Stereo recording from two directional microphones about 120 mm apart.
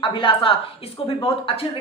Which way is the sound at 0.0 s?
45° left (ahead or behind).